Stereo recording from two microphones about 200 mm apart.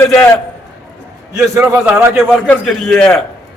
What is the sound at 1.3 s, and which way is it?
A man's voice, 15° right (ahead or behind).